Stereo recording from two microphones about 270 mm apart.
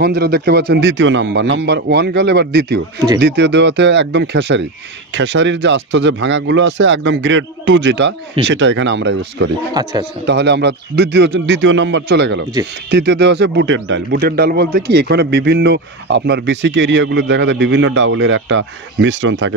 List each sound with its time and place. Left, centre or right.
0.0 s a man's voice: right
9.8 s speech: centre
10.2 s a man's voice: right